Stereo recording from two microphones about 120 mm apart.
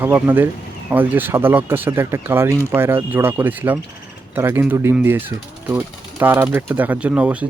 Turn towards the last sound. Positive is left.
turn(degrees=-10)  # may be behind; listen again after turning